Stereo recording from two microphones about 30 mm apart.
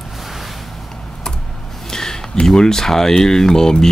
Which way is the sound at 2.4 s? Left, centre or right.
Centre.